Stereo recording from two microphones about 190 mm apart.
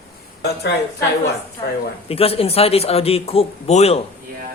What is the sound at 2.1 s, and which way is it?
Speech, 30° left (ahead or behind).